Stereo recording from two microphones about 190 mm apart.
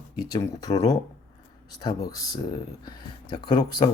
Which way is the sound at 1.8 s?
20° left (ahead or behind).